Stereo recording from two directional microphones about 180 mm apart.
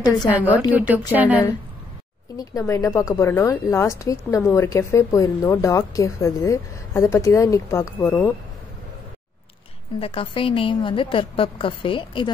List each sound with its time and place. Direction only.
0.4 s a woman's voice: 10° right (ahead or behind)
2.3 s speech: 15° left (ahead or behind)
9.9 s a woman's voice: 30° left (ahead or behind)